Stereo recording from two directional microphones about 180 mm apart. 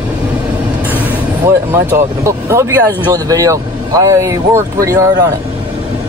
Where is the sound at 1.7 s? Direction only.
15° right (ahead or behind).